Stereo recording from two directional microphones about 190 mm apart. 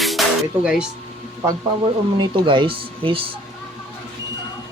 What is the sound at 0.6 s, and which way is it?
Speech, 5° right (ahead or behind).